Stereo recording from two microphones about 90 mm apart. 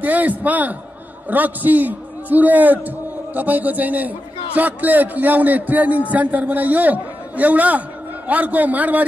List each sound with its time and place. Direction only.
0.0 s a man's voice: 20° right (ahead or behind)